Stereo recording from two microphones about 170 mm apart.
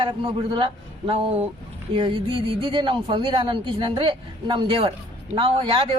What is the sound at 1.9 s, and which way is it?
A woman's voice, 30° right (ahead or behind).